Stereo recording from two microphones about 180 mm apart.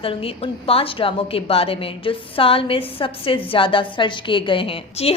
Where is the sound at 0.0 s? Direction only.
30° left (ahead or behind).